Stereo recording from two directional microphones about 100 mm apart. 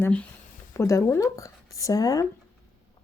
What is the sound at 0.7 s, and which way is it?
Speech, 30° left (ahead or behind).